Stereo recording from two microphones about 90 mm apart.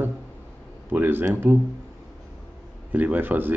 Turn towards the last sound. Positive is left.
turn(degrees=-20)  # may be behind; listen again after turning